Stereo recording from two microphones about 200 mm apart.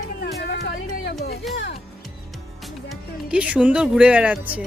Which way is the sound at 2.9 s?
5° right (ahead or behind).